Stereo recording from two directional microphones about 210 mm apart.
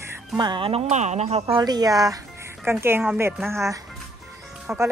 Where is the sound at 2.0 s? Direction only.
15° right (ahead or behind).